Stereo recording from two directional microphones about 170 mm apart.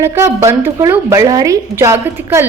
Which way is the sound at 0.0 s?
15° right (ahead or behind).